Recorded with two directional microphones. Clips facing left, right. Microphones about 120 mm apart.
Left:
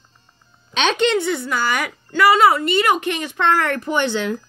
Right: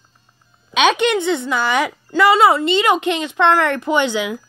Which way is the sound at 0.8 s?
10° right (ahead or behind).